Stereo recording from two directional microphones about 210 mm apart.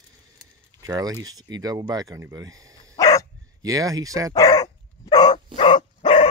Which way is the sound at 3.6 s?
15° right (ahead or behind).